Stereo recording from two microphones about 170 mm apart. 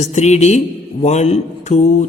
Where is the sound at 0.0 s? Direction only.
40° left (ahead or behind).